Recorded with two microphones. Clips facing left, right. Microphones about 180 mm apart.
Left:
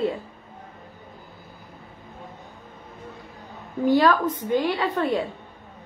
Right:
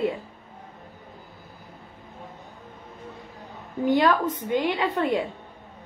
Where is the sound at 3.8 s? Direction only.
20° right (ahead or behind).